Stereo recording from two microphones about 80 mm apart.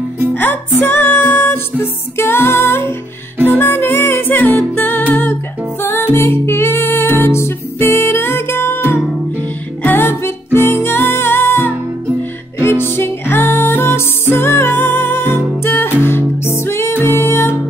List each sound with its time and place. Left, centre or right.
0.3 s music: left